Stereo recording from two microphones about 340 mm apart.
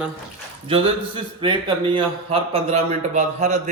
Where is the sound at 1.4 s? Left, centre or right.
Centre.